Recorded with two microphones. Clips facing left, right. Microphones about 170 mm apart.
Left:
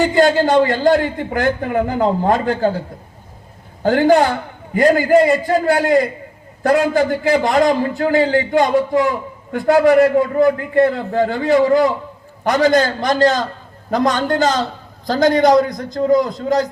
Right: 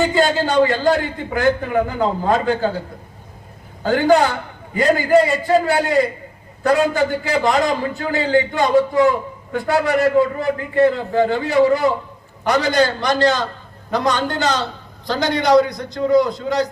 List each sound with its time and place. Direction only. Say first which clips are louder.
0.2 s a man's voice: left 4 dB; 45° left (ahead or behind)
3.8 s a man's voice: left 2 dB; 50° left (ahead or behind)